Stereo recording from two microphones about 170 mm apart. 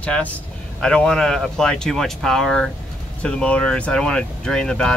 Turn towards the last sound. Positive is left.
turn(degrees=5)  # may be behind; listen again after turning